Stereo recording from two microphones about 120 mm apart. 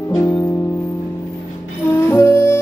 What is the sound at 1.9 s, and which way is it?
Music, 20° left (ahead or behind).